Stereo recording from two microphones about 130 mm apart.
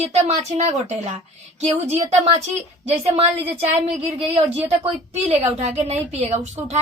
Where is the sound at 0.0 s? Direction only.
55° right (ahead or behind).